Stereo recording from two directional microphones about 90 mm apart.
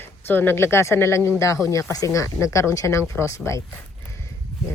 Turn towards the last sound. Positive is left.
turn(degrees=35)  # may be behind; listen again after turning